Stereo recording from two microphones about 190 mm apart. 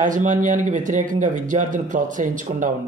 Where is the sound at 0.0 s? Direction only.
40° right (ahead or behind).